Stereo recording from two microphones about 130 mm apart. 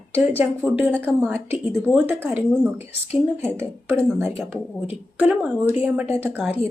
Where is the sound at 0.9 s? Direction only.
5° left (ahead or behind).